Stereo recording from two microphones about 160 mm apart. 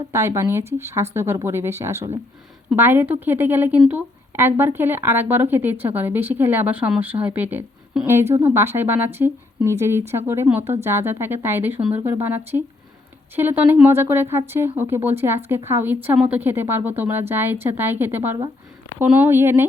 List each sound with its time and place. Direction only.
0.1 s a woman's voice: 15° right (ahead or behind)